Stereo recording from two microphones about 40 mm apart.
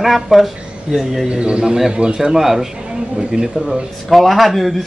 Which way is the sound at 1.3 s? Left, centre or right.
Right.